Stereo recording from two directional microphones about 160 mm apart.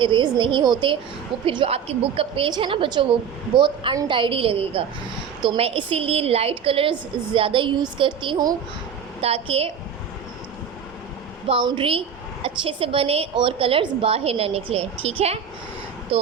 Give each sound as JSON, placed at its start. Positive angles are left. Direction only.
{"t": 0.0, "sound": "a woman's voice", "side_deg": -30}
{"t": 9.2, "sound": "a woman's voice", "side_deg": -35}
{"t": 11.4, "sound": "a woman's voice", "side_deg": -30}